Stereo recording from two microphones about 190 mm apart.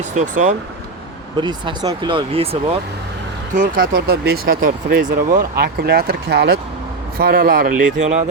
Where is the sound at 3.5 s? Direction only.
45° right (ahead or behind).